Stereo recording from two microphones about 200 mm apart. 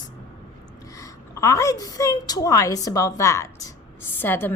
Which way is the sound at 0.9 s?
15° left (ahead or behind).